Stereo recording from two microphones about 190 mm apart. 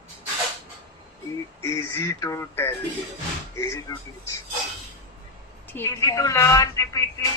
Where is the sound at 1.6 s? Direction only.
15° left (ahead or behind).